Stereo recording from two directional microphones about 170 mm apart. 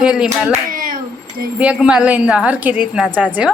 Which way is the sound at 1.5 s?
5° right (ahead or behind).